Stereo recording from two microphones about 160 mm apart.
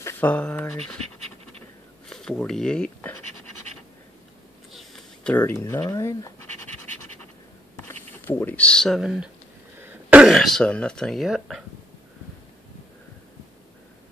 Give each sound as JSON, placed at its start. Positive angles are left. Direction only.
{"t": 0.0, "sound": "speech", "side_deg": 10}
{"t": 2.0, "sound": "speech", "side_deg": 5}
{"t": 4.7, "sound": "speech", "side_deg": 5}
{"t": 6.4, "sound": "scratch", "side_deg": 10}
{"t": 7.7, "sound": "speech", "side_deg": 15}
{"t": 9.8, "sound": "a sound", "side_deg": -10}